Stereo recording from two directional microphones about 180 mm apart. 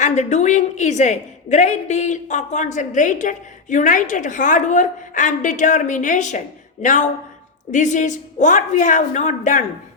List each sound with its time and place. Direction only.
0.0 s a woman's voice: 40° left (ahead or behind)